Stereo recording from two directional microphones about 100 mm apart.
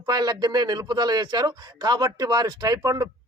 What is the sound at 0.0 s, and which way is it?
A man's voice, 40° right (ahead or behind).